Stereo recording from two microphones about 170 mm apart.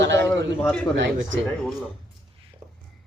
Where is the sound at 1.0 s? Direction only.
90° right.